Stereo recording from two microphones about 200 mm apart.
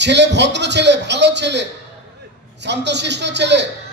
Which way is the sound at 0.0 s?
60° right (ahead or behind).